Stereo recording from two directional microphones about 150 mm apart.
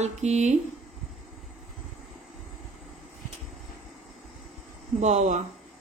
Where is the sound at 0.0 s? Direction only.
50° right (ahead or behind).